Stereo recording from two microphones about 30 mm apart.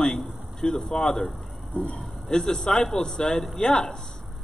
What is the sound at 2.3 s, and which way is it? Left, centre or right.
A man's voice, centre.